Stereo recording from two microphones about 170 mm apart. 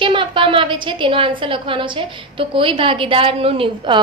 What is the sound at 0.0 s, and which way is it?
A woman's voice, 30° right (ahead or behind).